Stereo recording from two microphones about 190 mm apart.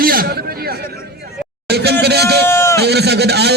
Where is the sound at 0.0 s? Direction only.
50° right (ahead or behind).